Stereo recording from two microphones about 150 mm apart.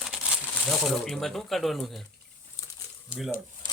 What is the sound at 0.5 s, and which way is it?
Speech, centre (ahead or behind).